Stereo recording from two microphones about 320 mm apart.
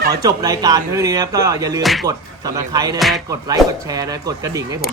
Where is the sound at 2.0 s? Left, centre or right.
Centre.